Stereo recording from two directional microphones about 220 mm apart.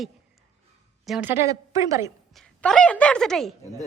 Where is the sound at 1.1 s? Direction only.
10° right (ahead or behind).